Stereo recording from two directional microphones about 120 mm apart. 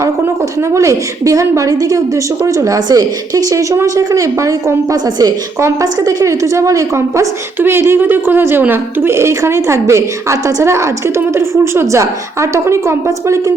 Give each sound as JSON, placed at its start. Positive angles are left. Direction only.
{"t": 0.7, "sound": "a woman's voice", "side_deg": -25}